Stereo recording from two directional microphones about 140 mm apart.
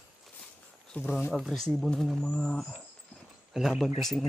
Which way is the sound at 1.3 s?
Centre (ahead or behind).